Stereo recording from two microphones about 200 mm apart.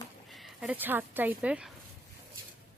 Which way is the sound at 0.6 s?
10° right (ahead or behind).